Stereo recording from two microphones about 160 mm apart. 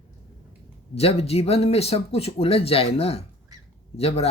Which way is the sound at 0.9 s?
40° left (ahead or behind).